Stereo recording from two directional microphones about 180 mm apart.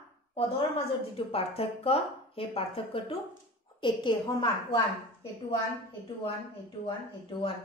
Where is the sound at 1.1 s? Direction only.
30° left (ahead or behind).